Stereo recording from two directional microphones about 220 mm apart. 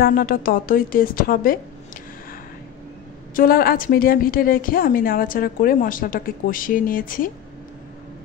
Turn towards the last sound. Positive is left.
turn(degrees=40)  # may be behind; listen again after turning